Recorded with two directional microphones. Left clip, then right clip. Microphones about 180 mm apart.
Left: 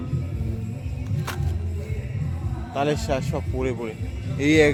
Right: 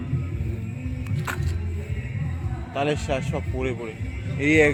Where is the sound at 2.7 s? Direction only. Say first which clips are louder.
Left 1 dB; 5° left (ahead or behind).